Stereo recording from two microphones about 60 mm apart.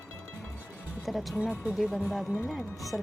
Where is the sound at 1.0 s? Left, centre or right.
Centre.